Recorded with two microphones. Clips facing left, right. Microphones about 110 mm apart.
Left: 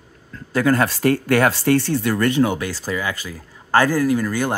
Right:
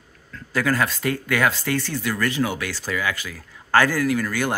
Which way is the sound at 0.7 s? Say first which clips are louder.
Left 7 dB; 40° left (ahead or behind).